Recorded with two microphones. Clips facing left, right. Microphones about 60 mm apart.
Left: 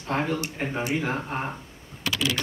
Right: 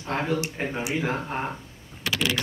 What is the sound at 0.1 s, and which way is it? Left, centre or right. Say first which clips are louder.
Speech: even; left.